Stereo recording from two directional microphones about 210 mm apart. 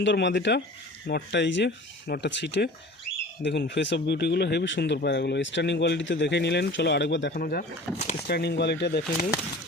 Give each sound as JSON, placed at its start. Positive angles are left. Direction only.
{"t": 0.0, "sound": "speech", "side_deg": 55}